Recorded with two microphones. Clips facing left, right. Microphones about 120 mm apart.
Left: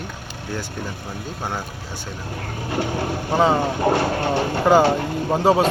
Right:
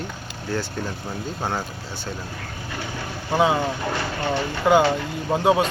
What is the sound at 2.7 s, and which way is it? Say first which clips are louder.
Speech: left 9 dB; 45° left (ahead or behind).